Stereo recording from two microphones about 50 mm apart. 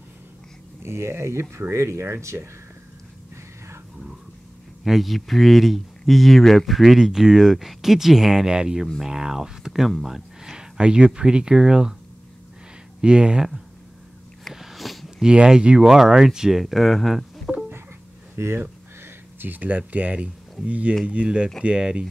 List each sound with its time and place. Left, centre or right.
0.8 s speech: right
4.8 s speech: centre
13.0 s speech: centre
14.5 s a sound: centre
15.2 s speech: centre
18.3 s speech: right
18.6 s a sound: right
19.9 s speech: right